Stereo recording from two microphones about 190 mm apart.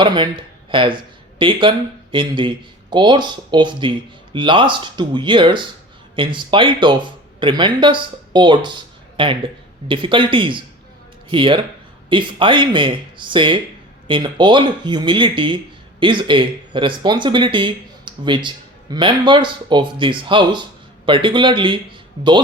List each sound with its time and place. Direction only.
0.0 s speech: 25° right (ahead or behind)